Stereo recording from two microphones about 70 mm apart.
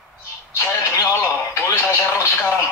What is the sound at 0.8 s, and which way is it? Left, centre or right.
Speech, left.